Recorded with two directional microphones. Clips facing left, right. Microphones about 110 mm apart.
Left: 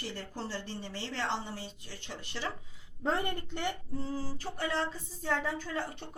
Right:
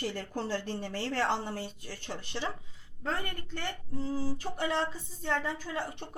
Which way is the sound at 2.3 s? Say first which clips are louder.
Right 2 dB; 20° right (ahead or behind).